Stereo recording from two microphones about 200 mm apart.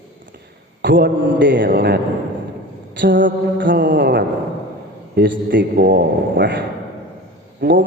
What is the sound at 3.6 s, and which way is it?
Speech, 65° right (ahead or behind).